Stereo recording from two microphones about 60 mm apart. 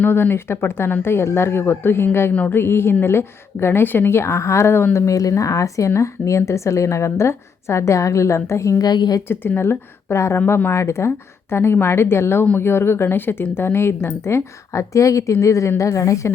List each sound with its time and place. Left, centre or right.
0.0 s speech: left
5.0 s speech: left
9.3 s speech: left
10.3 s speech: left